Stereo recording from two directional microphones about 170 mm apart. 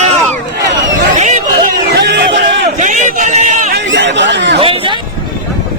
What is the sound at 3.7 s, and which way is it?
Speech, 90° right.